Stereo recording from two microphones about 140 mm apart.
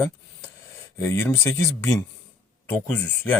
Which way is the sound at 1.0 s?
15° left (ahead or behind).